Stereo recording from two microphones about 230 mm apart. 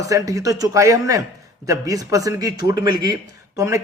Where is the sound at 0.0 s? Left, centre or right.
Centre.